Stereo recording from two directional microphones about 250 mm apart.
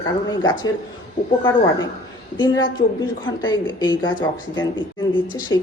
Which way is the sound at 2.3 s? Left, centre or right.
Centre.